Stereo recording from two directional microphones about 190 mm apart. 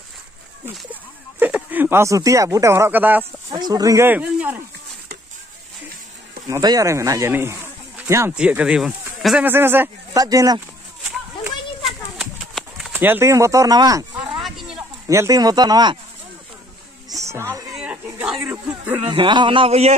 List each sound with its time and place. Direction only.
1.4 s speech: 10° right (ahead or behind)
3.6 s speech: 20° right (ahead or behind)
6.4 s speech: 20° right (ahead or behind)
12.2 s a sound: centre (ahead or behind); by 14.3 s 20° right (ahead or behind)
14.4 s a sound: centre (ahead or behind)
15.0 s a man's voice: 15° right (ahead or behind)
17.1 s music: 15° right (ahead or behind)
17.7 s a sound: 5° right (ahead or behind)
19.0 s a man's voice: 25° right (ahead or behind)